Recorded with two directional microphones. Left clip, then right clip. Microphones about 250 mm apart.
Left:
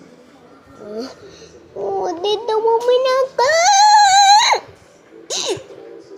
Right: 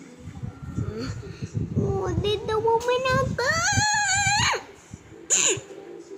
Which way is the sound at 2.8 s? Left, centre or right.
Centre.